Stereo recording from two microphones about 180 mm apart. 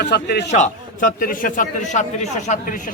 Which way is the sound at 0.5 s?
45° left (ahead or behind).